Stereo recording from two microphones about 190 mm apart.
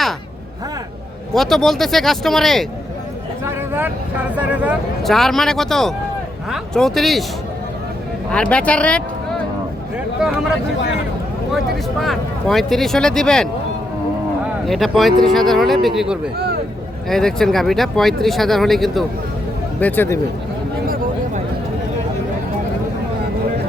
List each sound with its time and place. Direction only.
1.3 s speech: centre (ahead or behind)
3.4 s a sound: 10° right (ahead or behind)
4.4 s speech: 5° right (ahead or behind)
8.3 s speech: 5° left (ahead or behind)
11.9 s speech: centre (ahead or behind)
20.8 s a sound: 50° right (ahead or behind)